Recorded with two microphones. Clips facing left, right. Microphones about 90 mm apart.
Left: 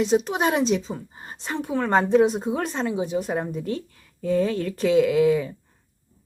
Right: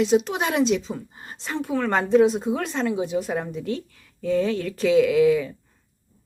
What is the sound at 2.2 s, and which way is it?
Speech, 45° left (ahead or behind).